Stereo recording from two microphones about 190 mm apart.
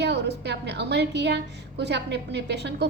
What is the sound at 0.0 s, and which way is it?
A woman's voice, 60° right (ahead or behind).